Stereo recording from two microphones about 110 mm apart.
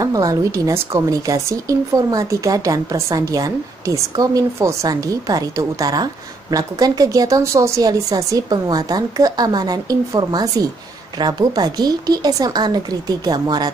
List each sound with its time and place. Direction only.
0.0 s a woman's voice: 30° right (ahead or behind)